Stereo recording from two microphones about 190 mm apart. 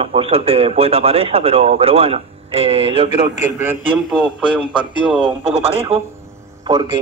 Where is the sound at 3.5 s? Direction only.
5° right (ahead or behind).